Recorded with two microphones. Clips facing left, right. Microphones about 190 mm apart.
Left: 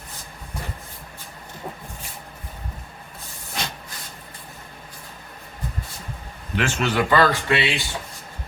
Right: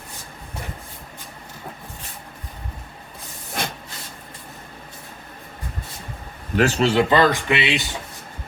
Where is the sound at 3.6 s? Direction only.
50° right (ahead or behind).